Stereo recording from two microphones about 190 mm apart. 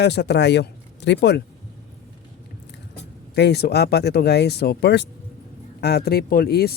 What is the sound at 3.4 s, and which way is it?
A man's voice, 60° left (ahead or behind).